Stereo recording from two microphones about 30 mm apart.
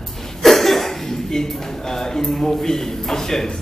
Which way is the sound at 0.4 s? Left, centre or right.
Centre.